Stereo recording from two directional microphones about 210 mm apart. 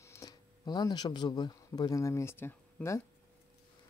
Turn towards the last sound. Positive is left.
turn(degrees=10)  # may be behind; listen again after turning